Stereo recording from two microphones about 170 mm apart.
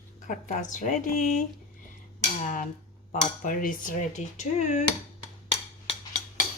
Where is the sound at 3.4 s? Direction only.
55° left (ahead or behind).